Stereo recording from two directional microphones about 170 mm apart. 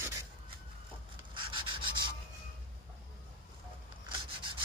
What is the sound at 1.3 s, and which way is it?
Rub, 30° right (ahead or behind).